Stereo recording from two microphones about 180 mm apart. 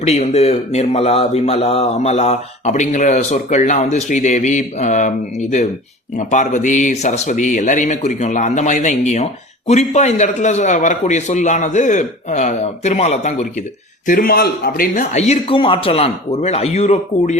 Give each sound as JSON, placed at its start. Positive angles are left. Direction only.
{"t": 0.0, "sound": "a man's voice", "side_deg": 35}
{"t": 14.1, "sound": "a man's voice", "side_deg": 55}